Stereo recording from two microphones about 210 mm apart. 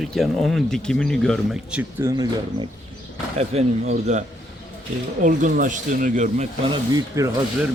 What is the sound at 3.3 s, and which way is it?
Speech, 30° right (ahead or behind).